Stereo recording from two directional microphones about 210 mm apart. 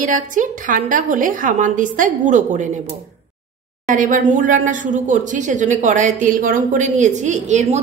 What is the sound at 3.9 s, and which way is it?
Speech, 40° right (ahead or behind).